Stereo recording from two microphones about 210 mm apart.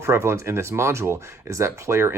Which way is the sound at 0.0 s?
15° right (ahead or behind).